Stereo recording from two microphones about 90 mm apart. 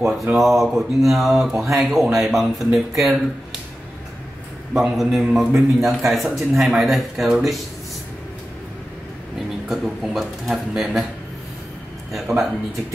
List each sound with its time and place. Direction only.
0.4 s a man's voice: centre (ahead or behind)
4.7 s a man's voice: centre (ahead or behind)
9.7 s a man's voice: centre (ahead or behind)
12.1 s a man's voice: centre (ahead or behind)